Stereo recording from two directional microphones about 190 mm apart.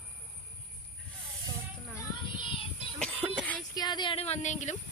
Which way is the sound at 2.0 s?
25° left (ahead or behind).